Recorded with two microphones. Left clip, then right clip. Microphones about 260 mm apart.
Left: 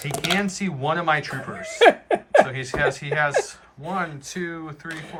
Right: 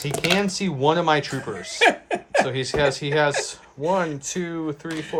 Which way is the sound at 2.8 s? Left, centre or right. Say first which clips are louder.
Right 1 dB; centre.